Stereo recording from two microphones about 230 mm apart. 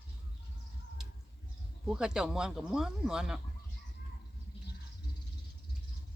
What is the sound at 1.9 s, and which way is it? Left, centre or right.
Speech, centre.